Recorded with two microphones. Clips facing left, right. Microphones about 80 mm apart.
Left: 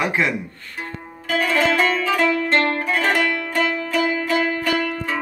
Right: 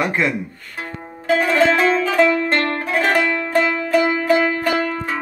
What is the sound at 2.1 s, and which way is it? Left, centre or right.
Music, right.